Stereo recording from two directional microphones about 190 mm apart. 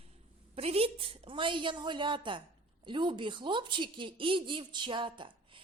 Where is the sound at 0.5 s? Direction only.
30° right (ahead or behind).